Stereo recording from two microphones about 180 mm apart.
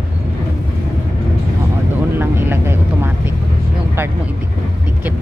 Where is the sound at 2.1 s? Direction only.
10° right (ahead or behind).